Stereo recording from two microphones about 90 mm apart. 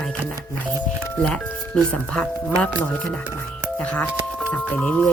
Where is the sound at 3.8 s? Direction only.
15° left (ahead or behind).